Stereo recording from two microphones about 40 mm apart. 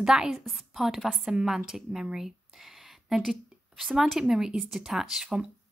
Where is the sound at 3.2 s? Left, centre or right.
Centre.